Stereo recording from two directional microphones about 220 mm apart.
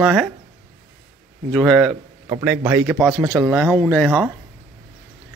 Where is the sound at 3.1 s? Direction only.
15° right (ahead or behind).